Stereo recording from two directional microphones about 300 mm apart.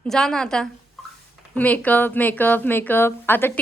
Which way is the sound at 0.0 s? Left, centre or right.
Centre.